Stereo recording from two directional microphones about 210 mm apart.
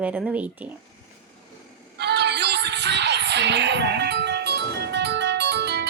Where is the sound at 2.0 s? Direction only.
50° right (ahead or behind).